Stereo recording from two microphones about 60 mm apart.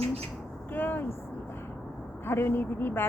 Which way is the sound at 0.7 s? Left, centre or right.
Left.